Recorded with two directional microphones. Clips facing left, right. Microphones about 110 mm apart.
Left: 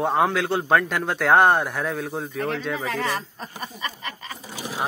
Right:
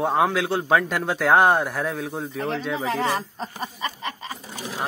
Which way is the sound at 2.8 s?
30° right (ahead or behind).